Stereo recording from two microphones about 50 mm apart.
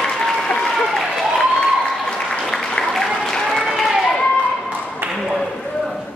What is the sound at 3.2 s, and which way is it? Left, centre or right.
Applause, centre.